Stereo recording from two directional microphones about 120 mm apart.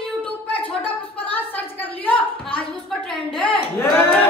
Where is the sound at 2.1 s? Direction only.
45° left (ahead or behind).